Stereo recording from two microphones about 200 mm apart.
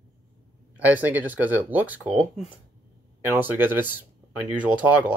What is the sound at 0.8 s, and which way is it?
Speech, 10° right (ahead or behind).